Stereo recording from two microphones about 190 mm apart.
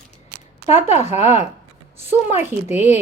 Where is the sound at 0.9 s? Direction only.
35° left (ahead or behind).